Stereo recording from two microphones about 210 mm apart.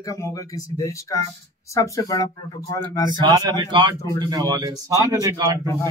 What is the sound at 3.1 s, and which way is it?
A man's voice, 20° right (ahead or behind).